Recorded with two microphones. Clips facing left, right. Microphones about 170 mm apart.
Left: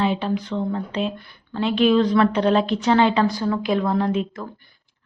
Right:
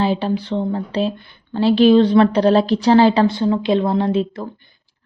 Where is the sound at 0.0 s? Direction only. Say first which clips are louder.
Right 3 dB; 35° right (ahead or behind).